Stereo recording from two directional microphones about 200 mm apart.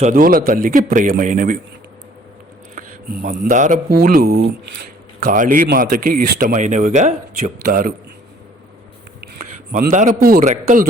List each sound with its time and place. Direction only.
0.0 s a man's voice: 45° right (ahead or behind)
2.7 s speech: 45° right (ahead or behind)
5.2 s a man's voice: 40° right (ahead or behind)
9.4 s a man's voice: 45° right (ahead or behind)